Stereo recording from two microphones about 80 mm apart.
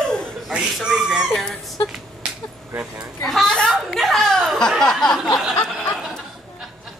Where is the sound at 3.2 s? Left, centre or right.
Centre.